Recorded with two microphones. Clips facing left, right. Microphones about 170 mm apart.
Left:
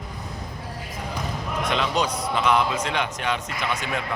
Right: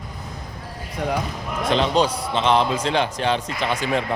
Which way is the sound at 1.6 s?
30° right (ahead or behind).